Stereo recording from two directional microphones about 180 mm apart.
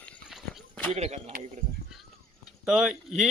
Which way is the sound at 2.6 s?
5° right (ahead or behind).